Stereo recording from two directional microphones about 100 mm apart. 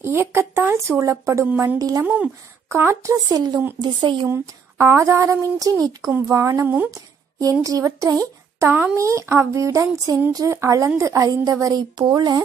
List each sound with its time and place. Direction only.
0.0 s speech: 25° right (ahead or behind)
2.7 s a woman's voice: 25° right (ahead or behind); by 4.3 s 50° right (ahead or behind)
4.3 s speech: 25° right (ahead or behind)